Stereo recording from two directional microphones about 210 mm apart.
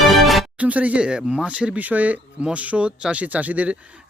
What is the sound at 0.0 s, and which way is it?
Speech, centre (ahead or behind).